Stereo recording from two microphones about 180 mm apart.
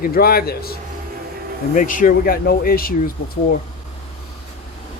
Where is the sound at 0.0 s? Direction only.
55° left (ahead or behind).